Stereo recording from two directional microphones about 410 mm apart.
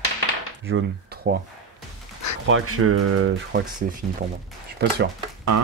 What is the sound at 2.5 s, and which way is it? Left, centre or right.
Speech, right.